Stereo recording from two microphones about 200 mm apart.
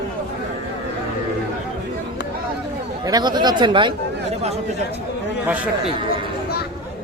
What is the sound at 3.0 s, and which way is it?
Speech, 20° right (ahead or behind).